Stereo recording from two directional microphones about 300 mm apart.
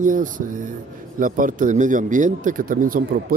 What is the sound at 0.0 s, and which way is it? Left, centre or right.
A man's voice, right.